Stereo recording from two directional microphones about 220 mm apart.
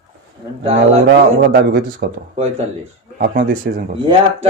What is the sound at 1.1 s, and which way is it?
Speech, 45° right (ahead or behind).